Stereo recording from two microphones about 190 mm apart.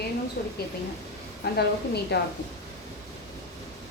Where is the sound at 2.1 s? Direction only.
60° left (ahead or behind).